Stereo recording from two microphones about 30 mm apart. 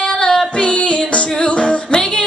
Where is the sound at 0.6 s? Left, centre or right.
Left.